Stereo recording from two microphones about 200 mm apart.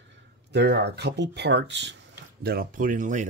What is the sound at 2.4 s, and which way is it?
Speech, 50° right (ahead or behind).